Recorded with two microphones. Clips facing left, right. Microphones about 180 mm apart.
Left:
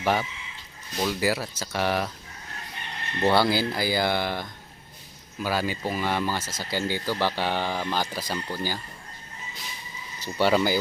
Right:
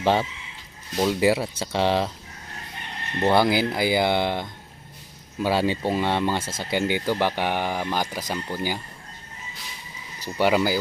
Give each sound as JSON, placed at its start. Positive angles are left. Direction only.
{"t": 0.0, "sound": "speech", "side_deg": -25}
{"t": 3.2, "sound": "speech", "side_deg": -20}
{"t": 10.2, "sound": "speech", "side_deg": -10}